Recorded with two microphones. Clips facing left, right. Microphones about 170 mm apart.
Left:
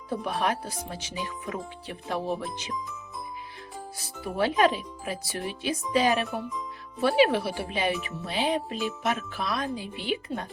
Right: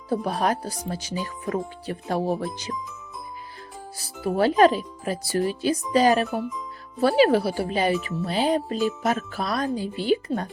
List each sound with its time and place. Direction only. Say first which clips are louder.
0.1 s speech: right 4 dB; 35° right (ahead or behind)
3.9 s speech: right 7 dB; 35° right (ahead or behind)